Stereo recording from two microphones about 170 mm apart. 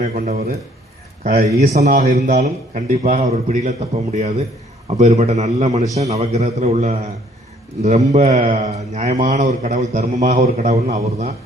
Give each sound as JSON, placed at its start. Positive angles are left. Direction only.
{"t": 0.0, "sound": "a man's voice", "side_deg": -45}